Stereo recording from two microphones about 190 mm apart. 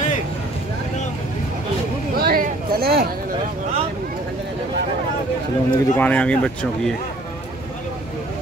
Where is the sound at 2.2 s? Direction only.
55° right (ahead or behind).